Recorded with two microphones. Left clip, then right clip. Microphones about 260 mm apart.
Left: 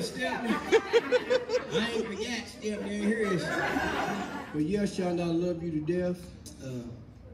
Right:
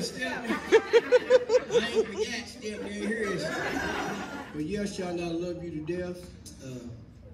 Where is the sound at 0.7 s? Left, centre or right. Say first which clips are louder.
Right 4 dB; centre.